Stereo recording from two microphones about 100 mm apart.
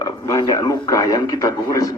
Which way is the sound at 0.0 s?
35° left (ahead or behind).